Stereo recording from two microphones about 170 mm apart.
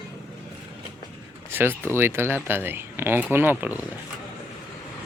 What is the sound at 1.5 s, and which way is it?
Speech, 10° right (ahead or behind).